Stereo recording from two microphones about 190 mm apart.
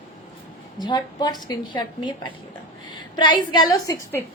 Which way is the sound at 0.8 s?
20° left (ahead or behind).